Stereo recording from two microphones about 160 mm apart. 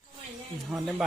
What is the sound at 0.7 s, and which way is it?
Speech, centre (ahead or behind).